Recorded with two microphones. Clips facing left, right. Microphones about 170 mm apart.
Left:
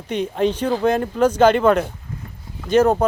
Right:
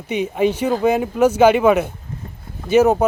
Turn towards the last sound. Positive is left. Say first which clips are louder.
# right 2 dB
turn(degrees=-10)  # may be behind; listen again after turning